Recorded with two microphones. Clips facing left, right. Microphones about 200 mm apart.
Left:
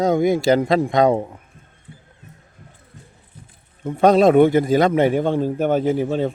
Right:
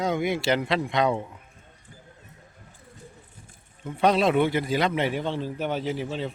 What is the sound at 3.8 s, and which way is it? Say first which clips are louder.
A man's voice: left 8 dB; 45° left (ahead or behind).